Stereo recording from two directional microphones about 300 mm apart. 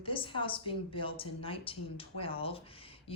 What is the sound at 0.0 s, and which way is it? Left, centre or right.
A woman's voice, centre.